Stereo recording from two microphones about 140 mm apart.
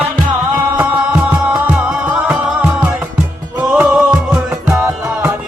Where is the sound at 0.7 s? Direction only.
5° right (ahead or behind).